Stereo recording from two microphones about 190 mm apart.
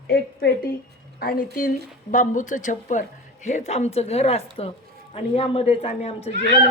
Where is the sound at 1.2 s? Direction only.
55° left (ahead or behind).